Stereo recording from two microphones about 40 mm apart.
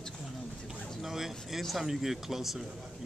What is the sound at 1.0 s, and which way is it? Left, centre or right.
A man's voice, centre.